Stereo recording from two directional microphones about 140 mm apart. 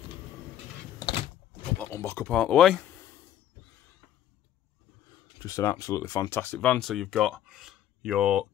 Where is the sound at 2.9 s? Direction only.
15° left (ahead or behind).